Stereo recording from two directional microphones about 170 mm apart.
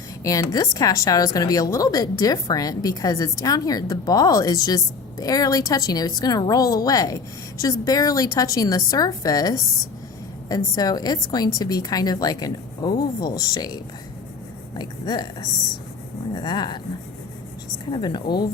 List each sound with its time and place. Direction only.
0.3 s a woman's voice: 20° left (ahead or behind)
14.8 s a woman's voice: 25° left (ahead or behind)
17.9 s a woman's voice: 25° left (ahead or behind)